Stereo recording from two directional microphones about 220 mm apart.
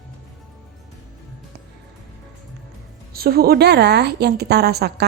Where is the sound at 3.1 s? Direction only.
45° right (ahead or behind).